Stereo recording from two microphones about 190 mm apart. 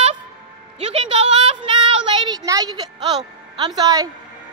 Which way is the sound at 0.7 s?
30° right (ahead or behind).